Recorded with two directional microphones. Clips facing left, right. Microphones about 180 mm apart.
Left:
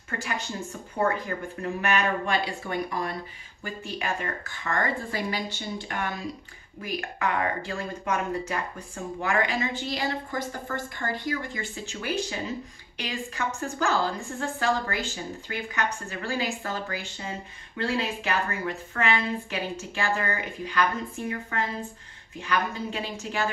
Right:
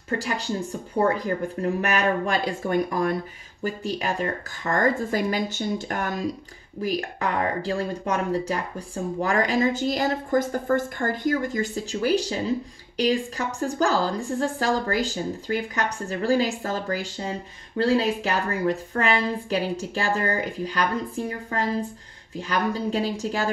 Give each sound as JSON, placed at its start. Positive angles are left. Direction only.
{"t": 0.2, "sound": "speech", "side_deg": -35}
{"t": 3.6, "sound": "speech", "side_deg": -40}